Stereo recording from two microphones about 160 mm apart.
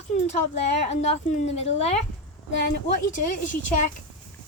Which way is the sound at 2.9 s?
55° left (ahead or behind).